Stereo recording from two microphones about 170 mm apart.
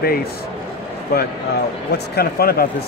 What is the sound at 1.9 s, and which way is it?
Speech, 70° left (ahead or behind).